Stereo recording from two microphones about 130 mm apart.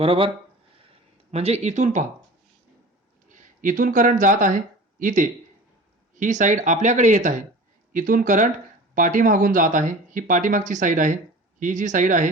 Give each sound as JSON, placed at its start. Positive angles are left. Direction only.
{"t": 0.0, "sound": "speech", "side_deg": -45}
{"t": 1.3, "sound": "speech", "side_deg": -55}
{"t": 3.2, "sound": "speech", "side_deg": -85}
{"t": 7.9, "sound": "speech", "side_deg": -90}
{"t": 11.6, "sound": "speech", "side_deg": -75}